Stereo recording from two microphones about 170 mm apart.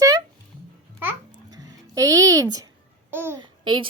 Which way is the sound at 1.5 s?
20° right (ahead or behind).